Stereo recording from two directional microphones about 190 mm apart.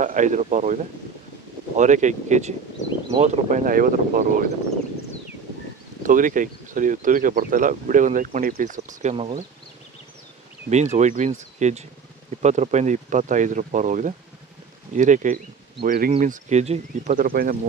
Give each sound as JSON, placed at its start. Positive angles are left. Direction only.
{"t": 0.0, "sound": "speech", "side_deg": -40}
{"t": 1.8, "sound": "speech", "side_deg": -40}
{"t": 2.8, "sound": "speech", "side_deg": 40}
{"t": 3.2, "sound": "speech", "side_deg": -40}
{"t": 6.0, "sound": "speech", "side_deg": -45}
{"t": 9.1, "sound": "speech", "side_deg": -30}
{"t": 10.7, "sound": "speech", "side_deg": -40}
{"t": 15.8, "sound": "speech", "side_deg": -50}
{"t": 16.2, "sound": "speech", "side_deg": -40}